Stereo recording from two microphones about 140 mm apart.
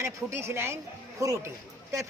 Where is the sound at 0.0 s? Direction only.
20° right (ahead or behind).